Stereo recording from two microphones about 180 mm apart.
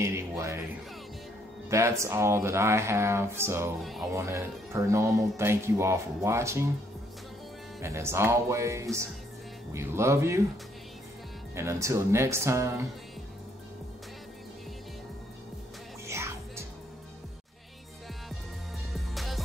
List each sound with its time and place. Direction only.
0.0 s speech: 15° right (ahead or behind)
1.7 s speech: 15° right (ahead or behind)
7.8 s speech: 15° right (ahead or behind)
11.5 s speech: 15° right (ahead or behind)
16.1 s music: 15° right (ahead or behind)
18.9 s music: centre (ahead or behind)